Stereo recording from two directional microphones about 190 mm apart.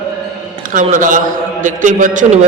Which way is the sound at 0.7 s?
45° right (ahead or behind).